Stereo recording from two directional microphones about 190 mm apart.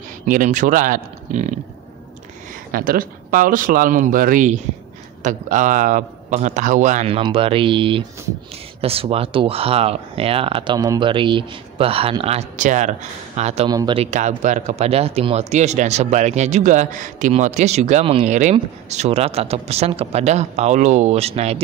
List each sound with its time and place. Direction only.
0.3 s speech: 40° right (ahead or behind)
2.7 s speech: 50° right (ahead or behind)
13.7 s speech: 20° right (ahead or behind)
14.1 s speech: 40° right (ahead or behind)